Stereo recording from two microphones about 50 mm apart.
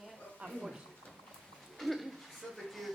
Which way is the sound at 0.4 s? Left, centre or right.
Right.